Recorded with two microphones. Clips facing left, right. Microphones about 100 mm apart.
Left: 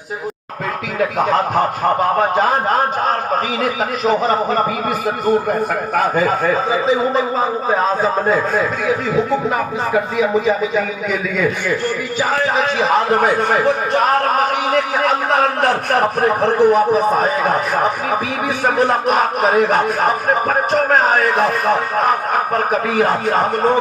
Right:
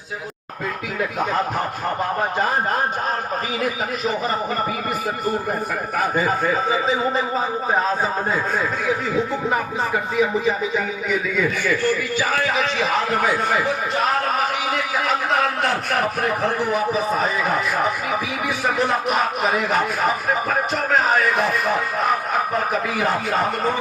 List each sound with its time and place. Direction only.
2.0 s a man's voice: 80° left
5.9 s a man's voice: 70° left (ahead or behind)
12.5 s speech: 40° left (ahead or behind)